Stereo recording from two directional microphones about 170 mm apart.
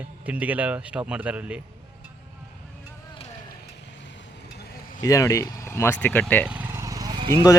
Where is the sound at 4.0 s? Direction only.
90° left.